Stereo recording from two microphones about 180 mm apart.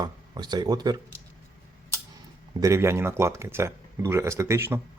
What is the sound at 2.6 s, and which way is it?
Speech, 15° right (ahead or behind).